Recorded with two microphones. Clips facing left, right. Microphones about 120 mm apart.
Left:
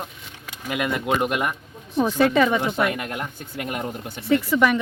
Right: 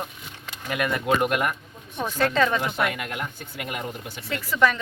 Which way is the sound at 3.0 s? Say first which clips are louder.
Left 2 dB; 40° left (ahead or behind).